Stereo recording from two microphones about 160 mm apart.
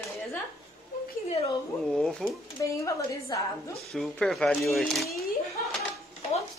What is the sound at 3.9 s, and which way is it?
Speech, centre (ahead or behind).